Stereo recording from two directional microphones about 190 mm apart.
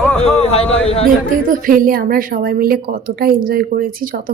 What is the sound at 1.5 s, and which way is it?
A woman's voice, 45° right (ahead or behind).